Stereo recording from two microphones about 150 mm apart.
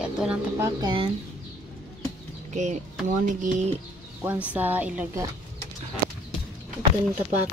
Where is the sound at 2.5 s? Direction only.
50° right (ahead or behind).